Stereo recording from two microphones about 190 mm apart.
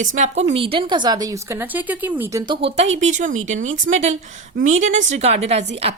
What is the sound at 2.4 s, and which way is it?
Speech, 25° right (ahead or behind).